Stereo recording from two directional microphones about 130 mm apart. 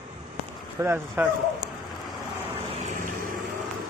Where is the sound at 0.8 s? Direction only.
20° right (ahead or behind).